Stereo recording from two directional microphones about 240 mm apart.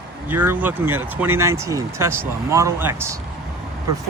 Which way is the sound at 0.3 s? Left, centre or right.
Centre.